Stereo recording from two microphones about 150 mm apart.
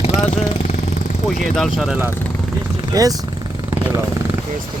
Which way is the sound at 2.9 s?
25° right (ahead or behind).